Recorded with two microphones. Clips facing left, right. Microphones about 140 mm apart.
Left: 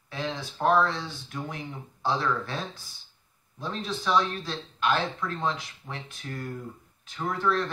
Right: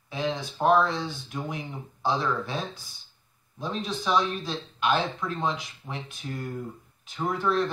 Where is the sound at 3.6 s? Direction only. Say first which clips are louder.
Right 2 dB; 15° right (ahead or behind).